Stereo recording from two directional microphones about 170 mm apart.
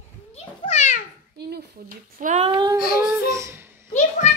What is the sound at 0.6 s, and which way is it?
Speech, 40° left (ahead or behind).